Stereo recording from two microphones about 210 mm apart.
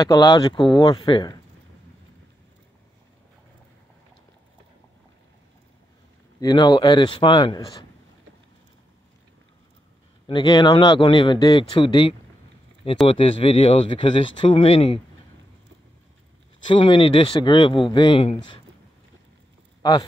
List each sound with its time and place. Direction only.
0.0 s speech: 15° left (ahead or behind)
6.4 s speech: 20° left (ahead or behind)
10.2 s speech: 20° left (ahead or behind)
16.6 s speech: 25° left (ahead or behind)
19.8 s speech: 20° left (ahead or behind)